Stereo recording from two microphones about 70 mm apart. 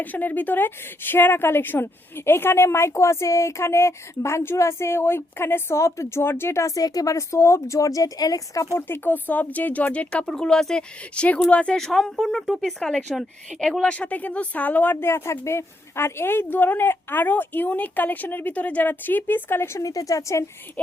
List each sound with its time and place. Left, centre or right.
0.0 s speech: left
8.9 s speech: left; by 13.1 s centre
13.5 s speech: centre
13.8 s speech: centre; by 19.8 s left
19.8 s speech: left
20.8 s speech: left